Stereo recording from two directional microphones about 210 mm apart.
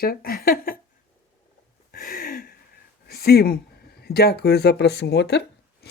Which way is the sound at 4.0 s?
50° left (ahead or behind).